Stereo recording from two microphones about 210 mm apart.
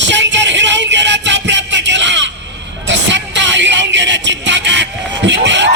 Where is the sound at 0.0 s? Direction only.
60° right (ahead or behind).